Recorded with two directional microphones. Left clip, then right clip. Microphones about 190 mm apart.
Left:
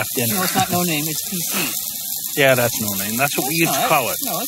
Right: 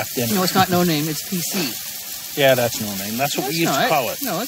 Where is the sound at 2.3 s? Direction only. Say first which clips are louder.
Left 1 dB; centre (ahead or behind).